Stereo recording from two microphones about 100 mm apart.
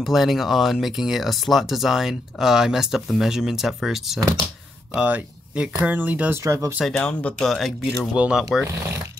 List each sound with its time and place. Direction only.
0.0 s speech: centre (ahead or behind)
6.4 s speech: 30° right (ahead or behind)
7.0 s speech: 10° left (ahead or behind)
7.4 s speech: centre (ahead or behind)
8.1 s speech: 10° right (ahead or behind)